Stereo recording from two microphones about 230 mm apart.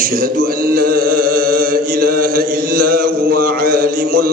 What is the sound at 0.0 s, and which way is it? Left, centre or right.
Mantra, right.